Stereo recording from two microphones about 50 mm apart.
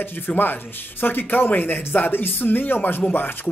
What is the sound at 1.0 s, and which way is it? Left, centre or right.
Speech, left.